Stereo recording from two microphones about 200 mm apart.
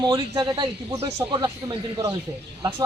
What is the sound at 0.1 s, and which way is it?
Speech, 20° right (ahead or behind).